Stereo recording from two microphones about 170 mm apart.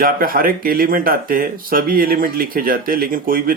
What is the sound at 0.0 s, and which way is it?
Speech, 60° right (ahead or behind).